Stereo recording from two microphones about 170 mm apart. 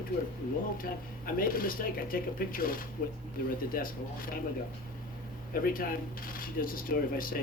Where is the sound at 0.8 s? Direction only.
55° left (ahead or behind).